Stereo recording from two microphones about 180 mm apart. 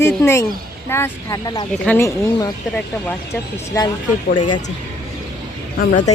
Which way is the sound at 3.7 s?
20° left (ahead or behind).